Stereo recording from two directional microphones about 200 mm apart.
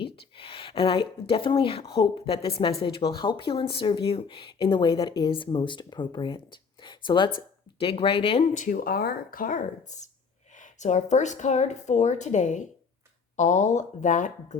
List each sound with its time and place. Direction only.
0.0 s speech: 25° left (ahead or behind)
8.5 s speech: 40° left (ahead or behind)